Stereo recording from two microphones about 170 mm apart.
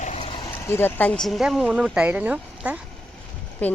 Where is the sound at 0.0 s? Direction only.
40° left (ahead or behind).